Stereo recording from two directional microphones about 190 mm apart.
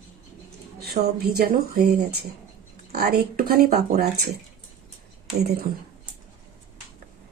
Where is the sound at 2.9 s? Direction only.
55° right (ahead or behind).